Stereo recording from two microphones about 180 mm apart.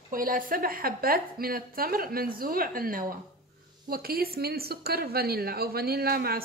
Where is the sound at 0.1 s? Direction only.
50° right (ahead or behind).